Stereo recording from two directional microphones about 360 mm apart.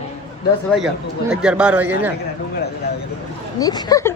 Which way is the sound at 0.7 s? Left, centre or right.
Centre.